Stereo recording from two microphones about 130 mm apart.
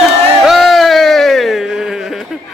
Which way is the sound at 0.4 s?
Centre (ahead or behind).